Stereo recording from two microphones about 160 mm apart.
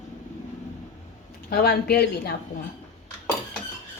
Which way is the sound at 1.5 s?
75° left (ahead or behind).